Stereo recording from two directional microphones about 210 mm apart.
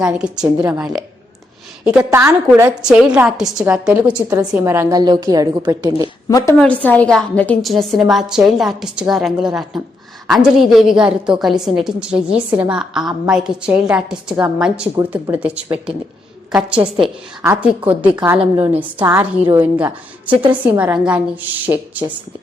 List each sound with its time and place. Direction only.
0.0 s a woman's voice: 5° right (ahead or behind)
6.2 s a woman's voice: 15° left (ahead or behind); by 21.2 s 5° right (ahead or behind)